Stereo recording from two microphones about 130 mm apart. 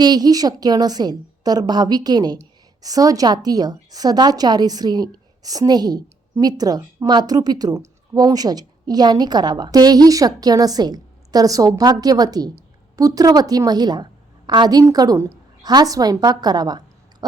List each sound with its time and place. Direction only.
0.0 s a woman's voice: 30° right (ahead or behind)